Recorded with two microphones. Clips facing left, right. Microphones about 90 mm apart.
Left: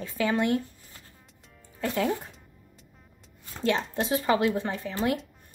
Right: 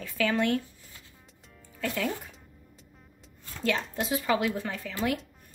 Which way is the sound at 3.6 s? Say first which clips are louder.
Left 3 dB; 25° left (ahead or behind).